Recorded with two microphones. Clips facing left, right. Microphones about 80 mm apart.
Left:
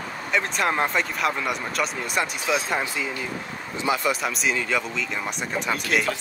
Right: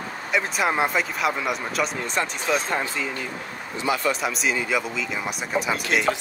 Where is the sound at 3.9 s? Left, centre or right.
Left.